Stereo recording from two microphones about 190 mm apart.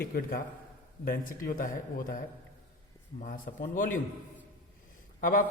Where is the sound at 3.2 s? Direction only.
45° left (ahead or behind).